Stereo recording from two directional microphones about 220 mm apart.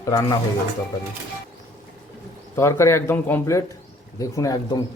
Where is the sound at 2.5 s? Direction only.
10° left (ahead or behind).